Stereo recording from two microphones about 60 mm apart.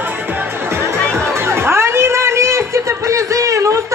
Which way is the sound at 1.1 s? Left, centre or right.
Right.